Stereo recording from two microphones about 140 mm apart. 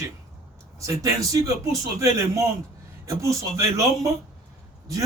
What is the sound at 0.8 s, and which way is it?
A man's voice, 25° right (ahead or behind).